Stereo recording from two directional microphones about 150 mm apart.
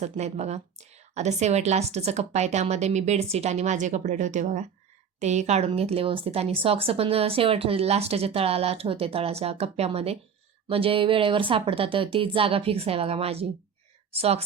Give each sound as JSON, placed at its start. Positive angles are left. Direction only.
{"t": 0.0, "sound": "a woman's voice", "side_deg": -50}